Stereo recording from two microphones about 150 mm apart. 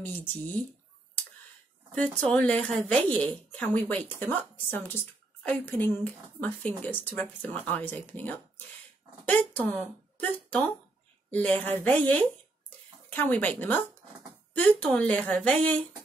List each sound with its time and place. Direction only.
0.0 s a woman's voice: 10° left (ahead or behind)
1.9 s a woman's voice: 10° left (ahead or behind)